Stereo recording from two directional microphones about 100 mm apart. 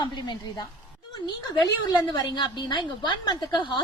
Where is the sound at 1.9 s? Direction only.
45° left (ahead or behind).